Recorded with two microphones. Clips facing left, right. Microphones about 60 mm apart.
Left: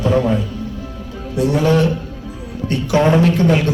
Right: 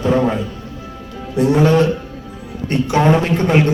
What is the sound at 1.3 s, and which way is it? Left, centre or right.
A man's voice, right.